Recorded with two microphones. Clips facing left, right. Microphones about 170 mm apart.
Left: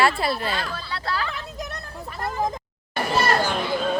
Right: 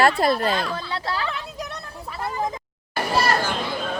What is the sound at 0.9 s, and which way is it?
Speech, 20° right (ahead or behind).